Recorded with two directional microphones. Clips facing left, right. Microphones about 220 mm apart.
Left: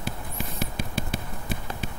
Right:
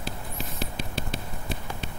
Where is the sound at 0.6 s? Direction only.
50° left (ahead or behind).